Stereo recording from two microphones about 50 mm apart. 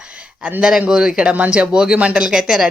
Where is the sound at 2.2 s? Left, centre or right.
Centre.